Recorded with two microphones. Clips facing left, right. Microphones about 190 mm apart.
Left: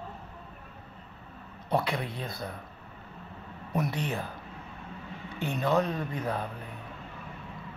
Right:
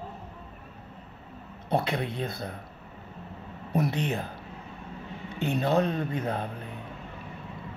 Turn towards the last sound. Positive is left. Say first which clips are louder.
# right 2 dB
turn(degrees=-25)  # may be behind; listen again after turning